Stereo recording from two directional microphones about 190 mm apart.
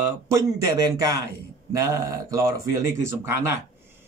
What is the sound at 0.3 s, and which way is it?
A man's voice, 15° right (ahead or behind).